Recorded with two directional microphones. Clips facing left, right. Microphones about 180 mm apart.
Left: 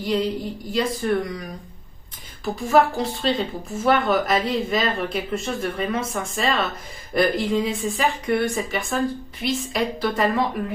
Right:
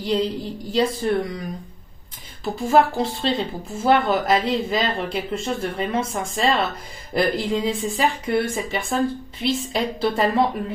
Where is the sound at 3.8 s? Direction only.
30° right (ahead or behind).